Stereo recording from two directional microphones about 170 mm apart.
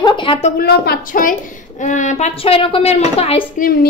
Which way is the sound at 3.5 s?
55° left (ahead or behind).